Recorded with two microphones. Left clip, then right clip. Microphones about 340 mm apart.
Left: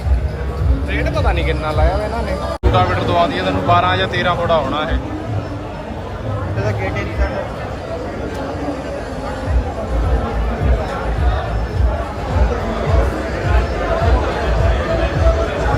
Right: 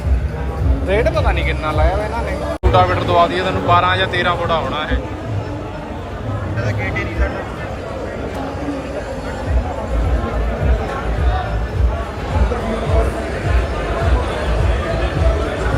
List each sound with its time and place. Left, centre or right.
0.9 s speech: centre